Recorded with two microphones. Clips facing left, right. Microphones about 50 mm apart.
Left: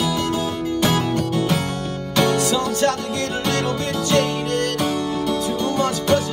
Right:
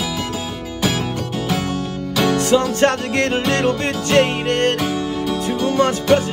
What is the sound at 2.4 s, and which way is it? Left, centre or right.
Music, right.